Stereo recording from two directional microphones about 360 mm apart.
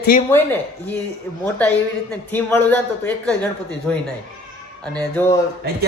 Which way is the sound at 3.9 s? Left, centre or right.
Centre.